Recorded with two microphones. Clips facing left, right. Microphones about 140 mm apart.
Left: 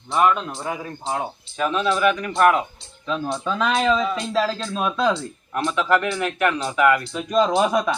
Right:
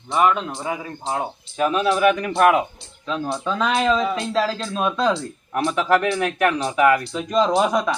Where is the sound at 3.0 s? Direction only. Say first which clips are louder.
Even; centre (ahead or behind).